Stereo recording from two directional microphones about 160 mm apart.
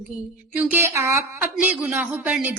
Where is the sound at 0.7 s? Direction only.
15° right (ahead or behind).